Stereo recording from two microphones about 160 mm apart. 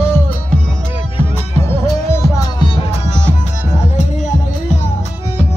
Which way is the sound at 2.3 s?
30° left (ahead or behind).